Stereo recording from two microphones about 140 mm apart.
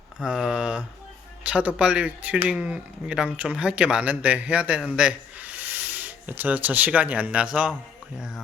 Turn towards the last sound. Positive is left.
turn(degrees=-10)  # may be behind; listen again after turning